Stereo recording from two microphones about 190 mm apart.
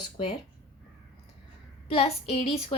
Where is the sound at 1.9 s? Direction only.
30° left (ahead or behind).